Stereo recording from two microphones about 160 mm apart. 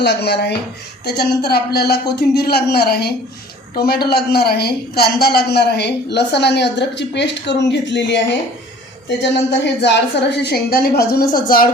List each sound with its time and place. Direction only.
0.0 s a woman's voice: 90° left
9.8 s a woman's voice: 90° left; by 11.7 s 65° left (ahead or behind)